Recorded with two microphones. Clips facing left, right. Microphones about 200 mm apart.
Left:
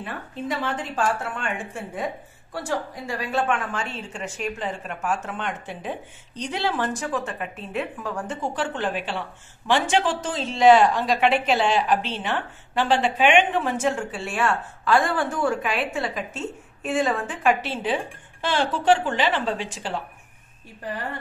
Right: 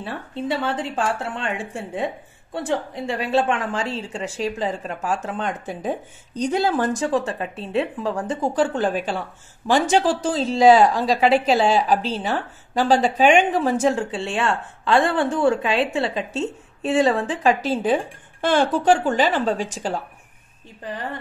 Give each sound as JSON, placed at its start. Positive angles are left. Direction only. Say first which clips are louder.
{"t": 0.0, "sound": "a woman's voice", "louder": "right 3 dB", "side_deg": -30}
{"t": 7.0, "sound": "speech", "louder": "right 6 dB", "side_deg": -30}